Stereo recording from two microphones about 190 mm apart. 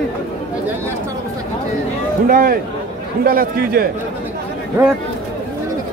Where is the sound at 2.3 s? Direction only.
50° right (ahead or behind).